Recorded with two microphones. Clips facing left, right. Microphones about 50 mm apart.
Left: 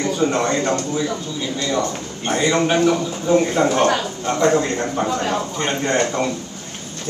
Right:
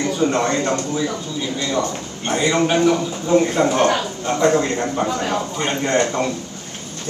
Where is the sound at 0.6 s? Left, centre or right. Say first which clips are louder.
Even; centre.